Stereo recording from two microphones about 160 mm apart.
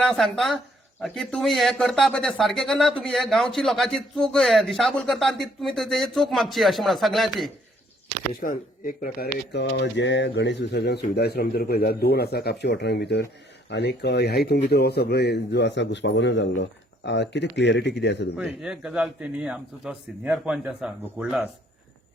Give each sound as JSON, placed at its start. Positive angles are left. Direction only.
{"t": 0.0, "sound": "speech", "side_deg": 0}
{"t": 8.4, "sound": "speech", "side_deg": 60}
{"t": 9.5, "sound": "speech", "side_deg": 90}
{"t": 18.3, "sound": "speech", "side_deg": -5}